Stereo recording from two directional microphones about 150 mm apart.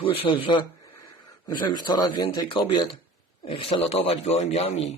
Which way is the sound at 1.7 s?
30° left (ahead or behind).